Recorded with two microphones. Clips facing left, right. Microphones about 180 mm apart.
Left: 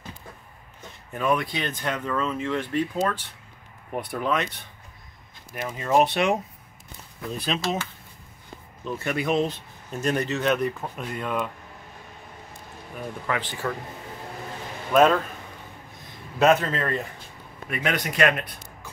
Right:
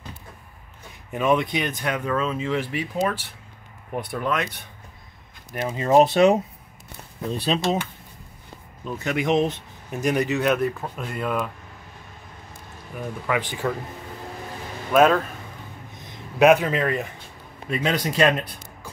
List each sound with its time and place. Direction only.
1.1 s speech: 20° right (ahead or behind)
3.9 s speech: centre (ahead or behind)
5.6 s speech: 30° right (ahead or behind)
8.9 s speech: 20° right (ahead or behind); by 11.5 s centre (ahead or behind)
13.3 s speech: 15° right (ahead or behind)
14.9 s speech: 5° right (ahead or behind)
16.3 s speech: 15° right (ahead or behind)
17.6 s speech: 25° right (ahead or behind)